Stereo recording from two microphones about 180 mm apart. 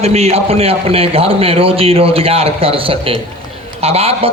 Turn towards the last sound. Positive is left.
turn(degrees=-35)  # may be behind; listen again after turning